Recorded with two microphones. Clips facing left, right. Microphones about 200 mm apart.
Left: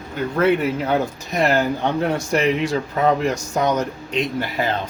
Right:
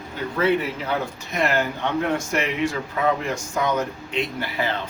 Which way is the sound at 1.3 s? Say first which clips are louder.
Left 4 dB; 35° left (ahead or behind).